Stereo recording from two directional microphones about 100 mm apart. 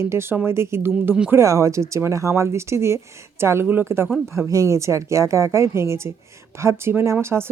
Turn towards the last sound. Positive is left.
turn(degrees=-25)  # may be behind; listen again after turning